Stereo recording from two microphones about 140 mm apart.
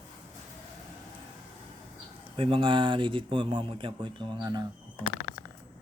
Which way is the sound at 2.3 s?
40° right (ahead or behind).